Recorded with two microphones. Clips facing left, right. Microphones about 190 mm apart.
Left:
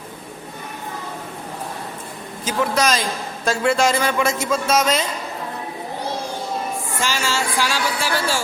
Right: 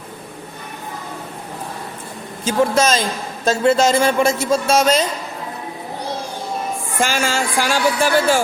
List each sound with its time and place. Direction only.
2.4 s a man's voice: 25° right (ahead or behind)
7.0 s speech: 50° right (ahead or behind)